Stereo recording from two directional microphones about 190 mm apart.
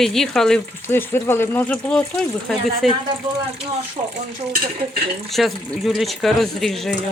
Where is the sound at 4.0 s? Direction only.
25° right (ahead or behind).